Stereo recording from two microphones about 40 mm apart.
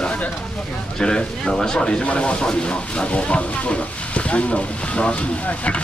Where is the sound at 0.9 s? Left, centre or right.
Centre.